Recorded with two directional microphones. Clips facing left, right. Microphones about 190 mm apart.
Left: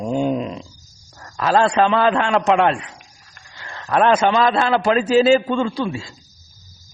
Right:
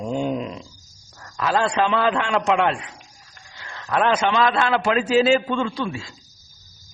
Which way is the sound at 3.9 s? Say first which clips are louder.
Left 4 dB; 40° left (ahead or behind).